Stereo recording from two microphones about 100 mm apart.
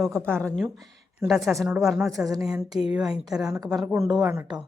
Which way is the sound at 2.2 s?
40° right (ahead or behind).